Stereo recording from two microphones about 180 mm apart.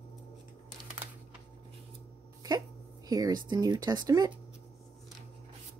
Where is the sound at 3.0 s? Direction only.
20° right (ahead or behind).